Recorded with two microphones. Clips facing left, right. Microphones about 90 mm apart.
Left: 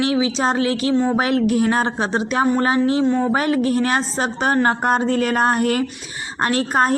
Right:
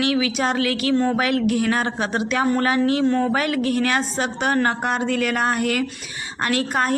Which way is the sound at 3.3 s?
30° left (ahead or behind).